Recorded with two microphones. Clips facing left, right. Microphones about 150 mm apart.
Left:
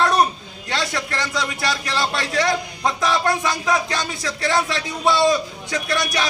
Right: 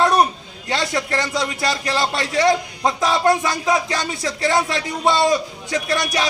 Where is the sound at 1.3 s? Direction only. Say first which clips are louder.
Right 2 dB; 20° right (ahead or behind).